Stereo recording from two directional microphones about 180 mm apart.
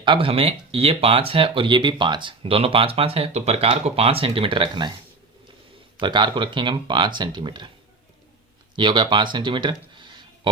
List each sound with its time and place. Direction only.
0.0 s speech: 30° right (ahead or behind)
6.0 s speech: 25° right (ahead or behind)
8.7 s speech: 25° right (ahead or behind)